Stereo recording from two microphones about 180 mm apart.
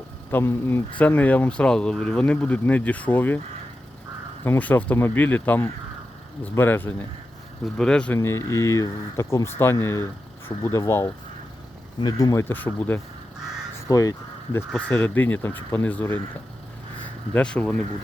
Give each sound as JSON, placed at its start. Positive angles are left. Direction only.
{"t": 0.3, "sound": "speech", "side_deg": 10}
{"t": 4.4, "sound": "speech", "side_deg": 10}
{"t": 14.7, "sound": "speech", "side_deg": 10}
{"t": 17.3, "sound": "speech", "side_deg": 5}